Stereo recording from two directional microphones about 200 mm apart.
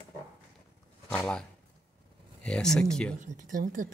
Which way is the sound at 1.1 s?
5° left (ahead or behind).